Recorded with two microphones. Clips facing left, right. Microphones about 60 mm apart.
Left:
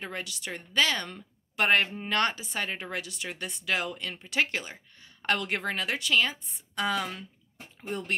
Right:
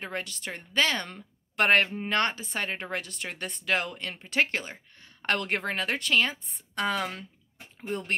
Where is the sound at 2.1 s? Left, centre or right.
Right.